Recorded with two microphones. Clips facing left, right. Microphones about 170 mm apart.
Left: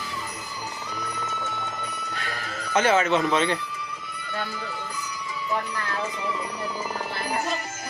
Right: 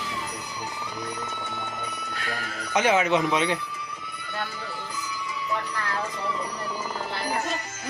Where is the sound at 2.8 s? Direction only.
15° right (ahead or behind).